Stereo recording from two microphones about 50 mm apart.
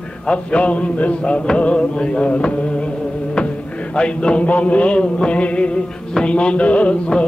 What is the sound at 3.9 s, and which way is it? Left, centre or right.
Music, left.